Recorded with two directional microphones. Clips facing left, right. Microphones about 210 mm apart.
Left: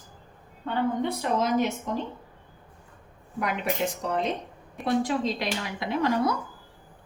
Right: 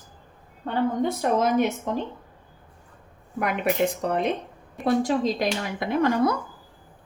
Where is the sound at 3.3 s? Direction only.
60° right (ahead or behind).